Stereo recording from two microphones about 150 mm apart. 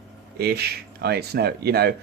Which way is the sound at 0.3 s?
90° right.